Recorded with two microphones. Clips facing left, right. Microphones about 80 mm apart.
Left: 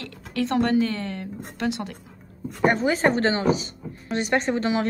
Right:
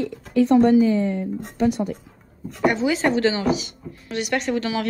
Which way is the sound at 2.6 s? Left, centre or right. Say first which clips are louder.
Even; left.